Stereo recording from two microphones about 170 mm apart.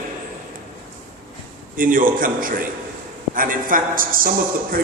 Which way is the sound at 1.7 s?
55° right (ahead or behind).